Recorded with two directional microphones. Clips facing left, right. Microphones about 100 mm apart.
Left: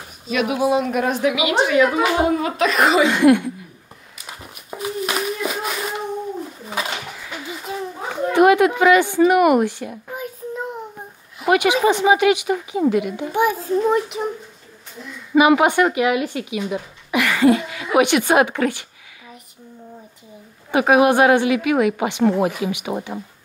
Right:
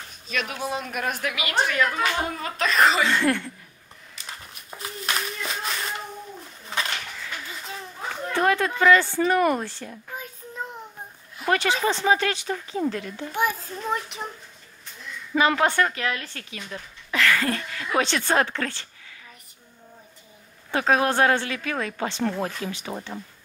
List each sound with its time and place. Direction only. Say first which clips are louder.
0.0 s speech: left 8 dB; 5° left (ahead or behind)
3.1 s speech: left 9 dB; 15° left (ahead or behind)
4.2 s a sound: left 3 dB; 10° left (ahead or behind)
8.0 s a woman's voice: left 9 dB; 15° left (ahead or behind)
11.3 s speech: left 6 dB; 15° left (ahead or behind)
13.4 s a child's voice: left 9 dB; 5° left (ahead or behind)
20.7 s speech: left 7 dB; 15° left (ahead or behind)